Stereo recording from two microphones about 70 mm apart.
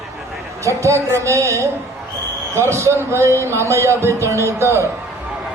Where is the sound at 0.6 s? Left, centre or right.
Right.